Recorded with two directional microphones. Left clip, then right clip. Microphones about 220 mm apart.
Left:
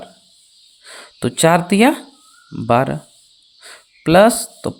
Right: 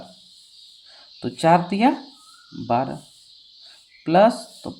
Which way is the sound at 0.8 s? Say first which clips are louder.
Left 9 dB; 45° left (ahead or behind).